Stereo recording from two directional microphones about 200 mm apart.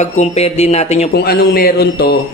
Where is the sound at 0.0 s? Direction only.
35° left (ahead or behind).